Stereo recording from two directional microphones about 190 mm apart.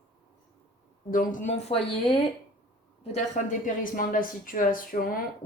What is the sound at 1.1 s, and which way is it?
Speech, 45° left (ahead or behind).